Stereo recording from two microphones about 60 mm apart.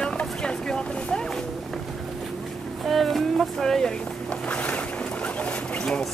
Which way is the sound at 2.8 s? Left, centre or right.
Centre.